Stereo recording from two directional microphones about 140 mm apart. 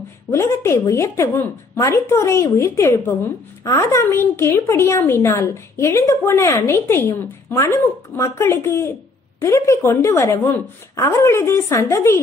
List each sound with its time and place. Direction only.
0.3 s speech: 20° left (ahead or behind)